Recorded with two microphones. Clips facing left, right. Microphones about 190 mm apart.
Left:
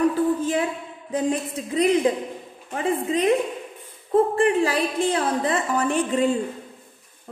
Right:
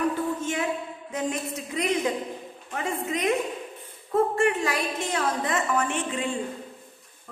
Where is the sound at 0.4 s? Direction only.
35° left (ahead or behind).